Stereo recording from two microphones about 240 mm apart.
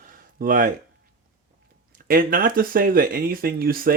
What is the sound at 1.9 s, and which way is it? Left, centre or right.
Speech, right.